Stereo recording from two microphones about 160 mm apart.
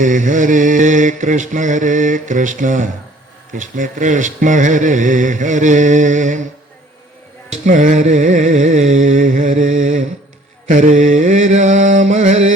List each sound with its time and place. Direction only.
0.0 s mantra: 55° right (ahead or behind)
7.5 s mantra: 50° right (ahead or behind)